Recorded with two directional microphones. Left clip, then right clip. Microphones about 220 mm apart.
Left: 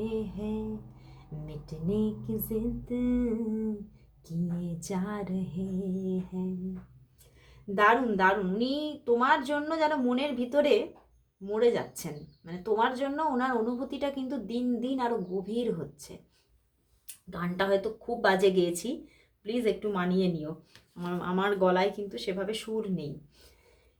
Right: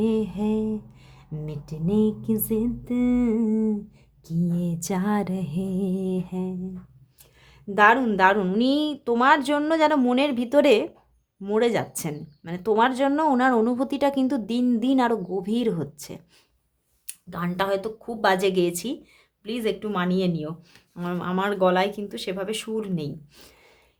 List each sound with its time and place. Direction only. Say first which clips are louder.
0.0 s speech: right 9 dB; 45° right (ahead or behind)
1.9 s speech: right 8 dB; 45° right (ahead or behind)
4.6 s speech: right 8 dB; 45° right (ahead or behind)
7.8 s speech: right 6 dB; 40° right (ahead or behind)
17.2 s speech: right 4 dB; 35° right (ahead or behind)